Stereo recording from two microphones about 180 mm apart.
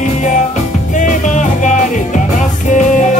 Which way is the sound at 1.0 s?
45° left (ahead or behind).